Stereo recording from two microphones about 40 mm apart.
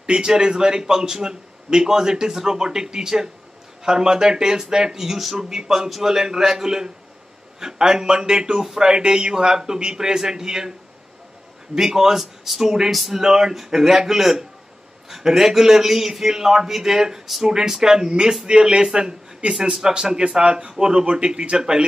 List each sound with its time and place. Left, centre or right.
0.0 s a man's voice: centre
11.7 s a man's voice: centre